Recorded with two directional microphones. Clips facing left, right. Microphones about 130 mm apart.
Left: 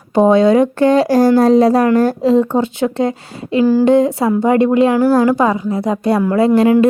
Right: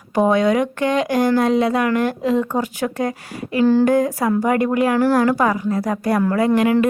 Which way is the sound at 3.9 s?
25° left (ahead or behind).